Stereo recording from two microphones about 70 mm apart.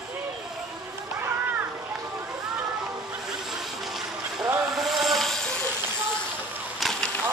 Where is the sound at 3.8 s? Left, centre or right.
Centre.